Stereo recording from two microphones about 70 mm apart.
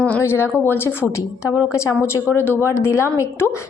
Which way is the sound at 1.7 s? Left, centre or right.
Left.